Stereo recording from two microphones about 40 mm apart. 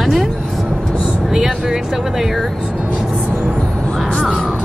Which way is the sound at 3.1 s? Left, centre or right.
Right.